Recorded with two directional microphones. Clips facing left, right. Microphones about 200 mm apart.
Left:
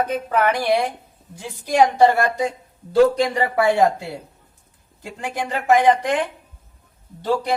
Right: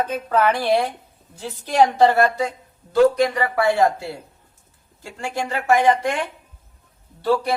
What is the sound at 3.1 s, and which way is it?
Speech, 25° left (ahead or behind).